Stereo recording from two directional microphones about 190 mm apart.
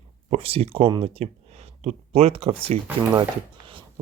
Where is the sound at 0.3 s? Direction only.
30° right (ahead or behind).